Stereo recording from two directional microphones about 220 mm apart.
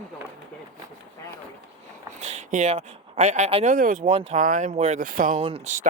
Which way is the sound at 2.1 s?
30° right (ahead or behind).